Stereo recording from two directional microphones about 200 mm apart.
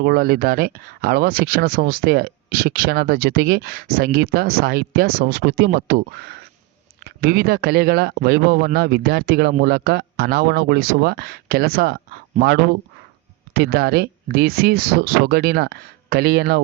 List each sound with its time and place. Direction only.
0.0 s speech: 50° right (ahead or behind)